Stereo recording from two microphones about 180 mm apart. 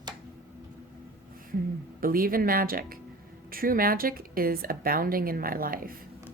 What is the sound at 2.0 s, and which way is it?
A woman's voice, 55° right (ahead or behind).